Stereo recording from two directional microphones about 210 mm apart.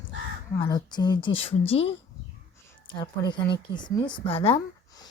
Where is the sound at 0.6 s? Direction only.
20° left (ahead or behind).